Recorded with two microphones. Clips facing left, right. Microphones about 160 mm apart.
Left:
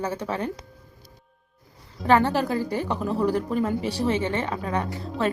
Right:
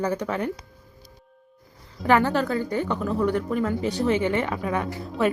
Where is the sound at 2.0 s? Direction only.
25° left (ahead or behind).